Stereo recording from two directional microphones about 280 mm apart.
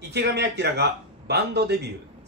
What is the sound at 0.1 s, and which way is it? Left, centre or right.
A man's voice, right.